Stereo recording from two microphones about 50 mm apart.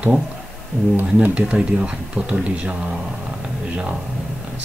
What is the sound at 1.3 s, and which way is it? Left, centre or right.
Speech, right.